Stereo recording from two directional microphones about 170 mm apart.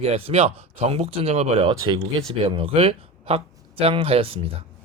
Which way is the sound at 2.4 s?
30° right (ahead or behind).